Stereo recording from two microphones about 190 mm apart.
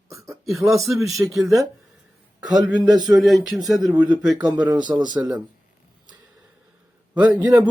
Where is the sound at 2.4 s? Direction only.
20° right (ahead or behind).